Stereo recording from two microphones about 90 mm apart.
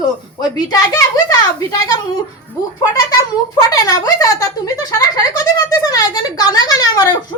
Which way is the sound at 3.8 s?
40° left (ahead or behind).